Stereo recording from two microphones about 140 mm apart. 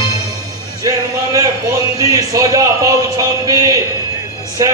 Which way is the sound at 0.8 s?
25° right (ahead or behind).